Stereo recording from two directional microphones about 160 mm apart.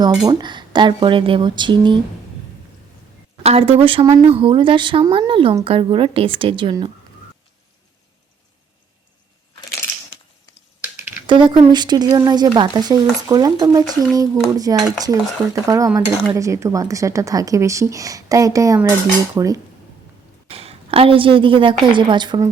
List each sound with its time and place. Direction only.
0.3 s speech: 30° right (ahead or behind)
3.4 s speech: 35° right (ahead or behind)
11.3 s speech: 30° right (ahead or behind)
18.8 s cutlery: 15° right (ahead or behind)
20.5 s a woman's voice: 40° right (ahead or behind)